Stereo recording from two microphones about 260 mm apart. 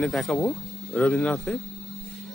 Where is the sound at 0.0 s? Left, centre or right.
Centre.